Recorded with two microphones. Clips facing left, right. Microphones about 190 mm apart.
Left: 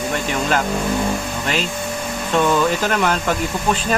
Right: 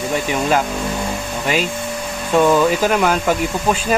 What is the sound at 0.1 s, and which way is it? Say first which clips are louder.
Speech: right 4 dB; 10° right (ahead or behind).